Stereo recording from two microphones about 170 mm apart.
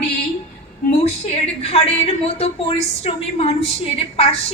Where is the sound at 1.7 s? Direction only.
35° left (ahead or behind).